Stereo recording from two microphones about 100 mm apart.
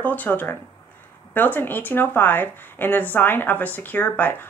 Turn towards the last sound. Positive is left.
turn(degrees=15)  # may be behind; listen again after turning